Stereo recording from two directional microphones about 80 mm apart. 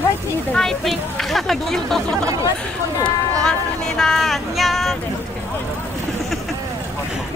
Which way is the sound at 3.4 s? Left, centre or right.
Centre.